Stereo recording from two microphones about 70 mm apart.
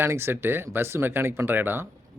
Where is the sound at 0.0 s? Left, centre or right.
Right.